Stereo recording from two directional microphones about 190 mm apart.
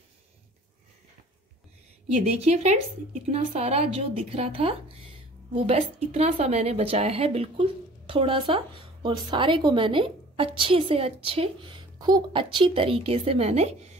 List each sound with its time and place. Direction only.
2.1 s a woman's voice: 35° right (ahead or behind)